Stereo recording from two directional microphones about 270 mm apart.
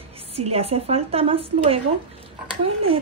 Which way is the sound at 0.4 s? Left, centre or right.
Right.